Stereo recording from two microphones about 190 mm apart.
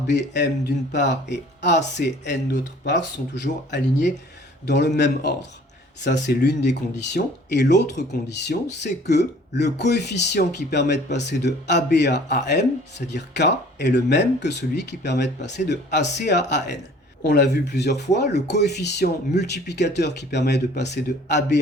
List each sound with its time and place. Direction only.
0.1 s speech: 65° left (ahead or behind)